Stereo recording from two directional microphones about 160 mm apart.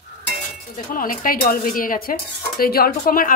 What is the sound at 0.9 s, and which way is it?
Speech, 60° left (ahead or behind).